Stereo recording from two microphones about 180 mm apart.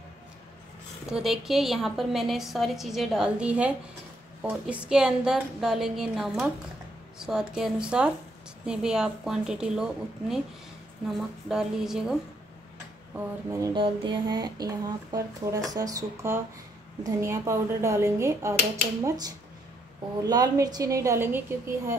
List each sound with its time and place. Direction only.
1.0 s a woman's voice: 5° right (ahead or behind)
13.5 s a woman's voice: 20° right (ahead or behind)